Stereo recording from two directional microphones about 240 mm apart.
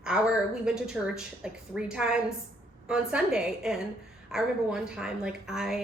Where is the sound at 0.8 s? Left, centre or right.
Centre.